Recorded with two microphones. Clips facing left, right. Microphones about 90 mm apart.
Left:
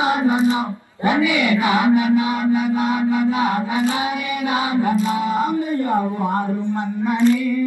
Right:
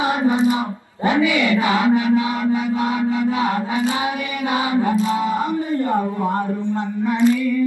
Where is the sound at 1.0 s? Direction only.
20° left (ahead or behind).